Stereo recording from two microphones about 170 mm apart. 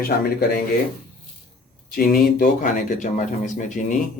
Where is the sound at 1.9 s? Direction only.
55° left (ahead or behind).